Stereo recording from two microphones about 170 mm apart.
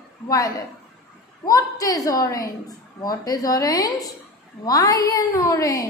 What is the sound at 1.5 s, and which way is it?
Speech, 20° left (ahead or behind).